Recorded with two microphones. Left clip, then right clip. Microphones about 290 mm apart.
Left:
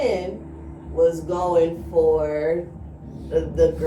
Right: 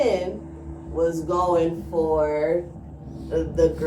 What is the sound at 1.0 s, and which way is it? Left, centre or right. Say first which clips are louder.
Speech: left 2 dB; centre.